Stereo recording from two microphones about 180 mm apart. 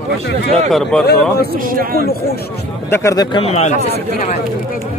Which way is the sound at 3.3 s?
35° left (ahead or behind).